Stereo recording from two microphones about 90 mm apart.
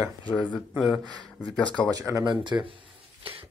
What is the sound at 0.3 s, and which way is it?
Speech, 15° left (ahead or behind).